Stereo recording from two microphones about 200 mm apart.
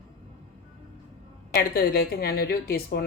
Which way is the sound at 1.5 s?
50° left (ahead or behind).